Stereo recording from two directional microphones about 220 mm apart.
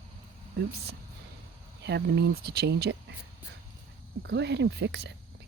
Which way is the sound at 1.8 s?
50° right (ahead or behind).